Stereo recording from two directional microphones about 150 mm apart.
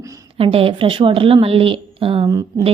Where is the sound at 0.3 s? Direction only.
35° right (ahead or behind).